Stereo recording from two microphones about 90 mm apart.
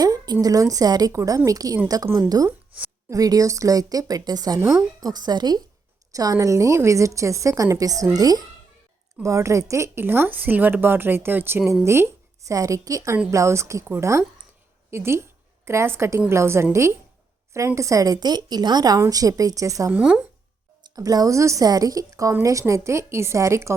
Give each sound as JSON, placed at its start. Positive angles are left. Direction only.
{"t": 0.0, "sound": "a sound", "side_deg": -45}
{"t": 0.4, "sound": "a woman's voice", "side_deg": -40}
{"t": 2.5, "sound": "a sound", "side_deg": -15}
{"t": 3.1, "sound": "a woman's voice", "side_deg": -40}
{"t": 6.1, "sound": "a woman's voice", "side_deg": -40}
{"t": 17.7, "sound": "a woman's voice", "side_deg": -40}
{"t": 18.9, "sound": "a woman's voice", "side_deg": -40}
{"t": 19.9, "sound": "speech", "side_deg": -10}
{"t": 20.8, "sound": "a woman's voice", "side_deg": -45}